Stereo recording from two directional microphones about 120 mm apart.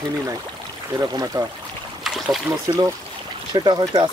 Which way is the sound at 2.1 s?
10° right (ahead or behind).